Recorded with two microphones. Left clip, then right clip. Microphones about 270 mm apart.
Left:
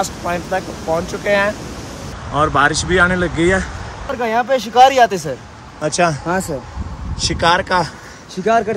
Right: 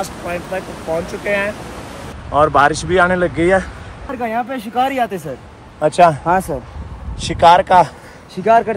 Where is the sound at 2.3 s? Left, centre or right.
Centre.